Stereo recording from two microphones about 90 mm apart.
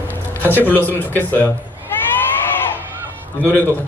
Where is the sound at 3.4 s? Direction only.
20° left (ahead or behind).